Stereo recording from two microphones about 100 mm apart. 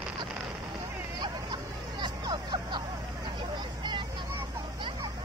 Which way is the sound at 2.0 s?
50° right (ahead or behind).